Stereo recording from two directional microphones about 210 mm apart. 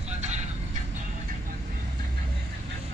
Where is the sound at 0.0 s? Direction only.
35° right (ahead or behind).